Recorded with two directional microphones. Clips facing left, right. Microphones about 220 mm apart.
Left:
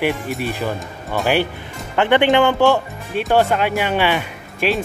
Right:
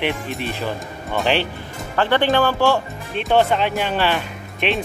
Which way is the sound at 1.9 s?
20° left (ahead or behind).